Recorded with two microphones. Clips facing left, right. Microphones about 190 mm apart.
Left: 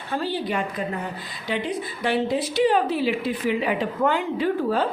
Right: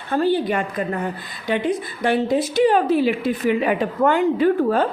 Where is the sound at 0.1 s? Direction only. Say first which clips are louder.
Right 7 dB; 50° right (ahead or behind).